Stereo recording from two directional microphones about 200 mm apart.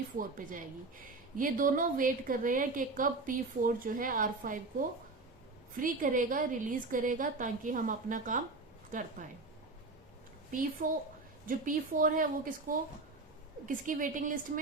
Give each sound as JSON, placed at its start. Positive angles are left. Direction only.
{"t": 0.2, "sound": "a woman's voice", "side_deg": -45}
{"t": 5.8, "sound": "a woman's voice", "side_deg": -40}
{"t": 10.5, "sound": "a woman's voice", "side_deg": -40}